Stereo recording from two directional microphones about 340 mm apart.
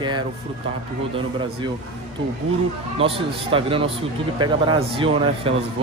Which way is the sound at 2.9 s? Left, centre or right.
Centre.